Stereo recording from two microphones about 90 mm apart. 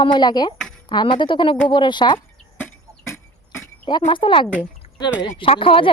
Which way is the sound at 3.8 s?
65° left (ahead or behind).